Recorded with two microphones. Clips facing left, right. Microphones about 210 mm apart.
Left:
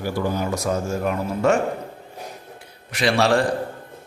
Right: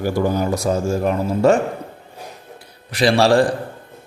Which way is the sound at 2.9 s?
35° right (ahead or behind).